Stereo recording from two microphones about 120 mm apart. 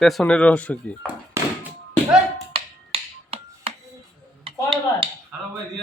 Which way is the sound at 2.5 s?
50° right (ahead or behind).